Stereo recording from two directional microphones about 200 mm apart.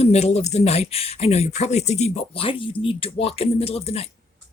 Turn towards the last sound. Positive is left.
turn(degrees=30)  # may be behind; listen again after turning